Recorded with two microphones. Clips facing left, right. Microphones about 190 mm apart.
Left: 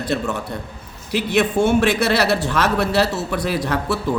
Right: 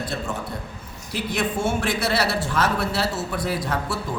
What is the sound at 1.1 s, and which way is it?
A man's voice, 75° left (ahead or behind).